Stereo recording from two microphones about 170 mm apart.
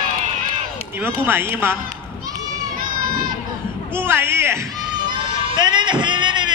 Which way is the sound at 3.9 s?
15° right (ahead or behind).